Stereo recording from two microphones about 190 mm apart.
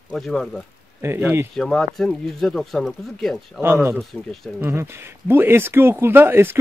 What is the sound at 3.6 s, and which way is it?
Speech, 15° right (ahead or behind).